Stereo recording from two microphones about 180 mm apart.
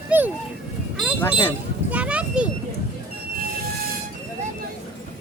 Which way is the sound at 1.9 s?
5° right (ahead or behind).